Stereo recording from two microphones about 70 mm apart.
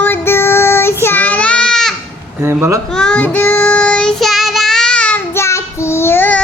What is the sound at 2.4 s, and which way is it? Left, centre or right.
Speech, right.